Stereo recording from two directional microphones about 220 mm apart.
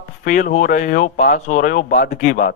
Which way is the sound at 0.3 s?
35° left (ahead or behind).